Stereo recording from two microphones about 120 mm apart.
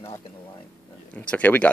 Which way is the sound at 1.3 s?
10° left (ahead or behind).